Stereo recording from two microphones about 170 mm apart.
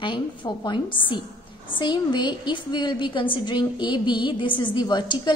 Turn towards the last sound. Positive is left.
turn(degrees=25)  # may be behind; listen again after turning